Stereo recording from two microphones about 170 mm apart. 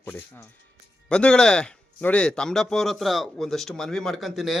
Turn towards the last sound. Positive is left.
turn(degrees=0)  # may be behind; listen again after turning